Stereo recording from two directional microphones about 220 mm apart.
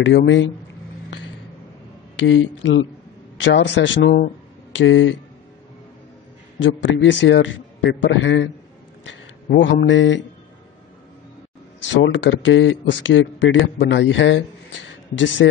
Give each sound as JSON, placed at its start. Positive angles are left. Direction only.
{"t": 0.0, "sound": "a man's voice", "side_deg": 55}
{"t": 2.1, "sound": "a man's voice", "side_deg": 60}
{"t": 6.6, "sound": "a man's voice", "side_deg": 55}
{"t": 11.9, "sound": "a man's voice", "side_deg": 55}